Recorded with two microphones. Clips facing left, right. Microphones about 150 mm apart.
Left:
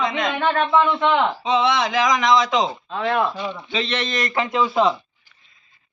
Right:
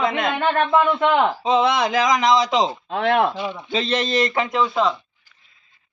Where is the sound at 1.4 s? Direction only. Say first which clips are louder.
Right 1 dB; 45° right (ahead or behind).